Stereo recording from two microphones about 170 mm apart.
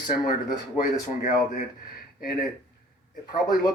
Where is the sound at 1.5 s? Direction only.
60° left (ahead or behind).